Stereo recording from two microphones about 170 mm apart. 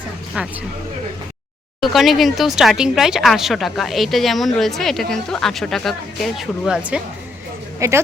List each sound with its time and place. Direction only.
0.4 s speech: 5° right (ahead or behind)
1.8 s speech: centre (ahead or behind)
7.8 s a woman's voice: 15° right (ahead or behind)